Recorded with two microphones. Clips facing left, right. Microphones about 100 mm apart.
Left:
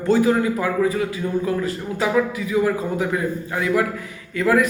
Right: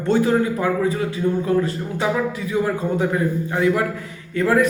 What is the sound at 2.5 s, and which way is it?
A man's voice, 30° right (ahead or behind).